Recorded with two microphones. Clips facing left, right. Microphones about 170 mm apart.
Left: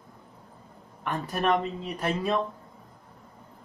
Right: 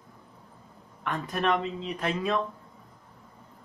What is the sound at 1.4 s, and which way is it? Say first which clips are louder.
Speech: left 2 dB; 40° left (ahead or behind).